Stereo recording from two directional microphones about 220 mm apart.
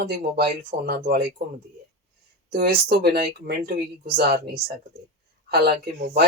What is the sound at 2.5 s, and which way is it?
Speech, 45° right (ahead or behind).